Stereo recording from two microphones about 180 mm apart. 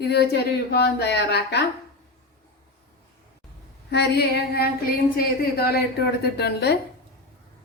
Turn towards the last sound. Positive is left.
turn(degrees=65)  # may be behind; listen again after turning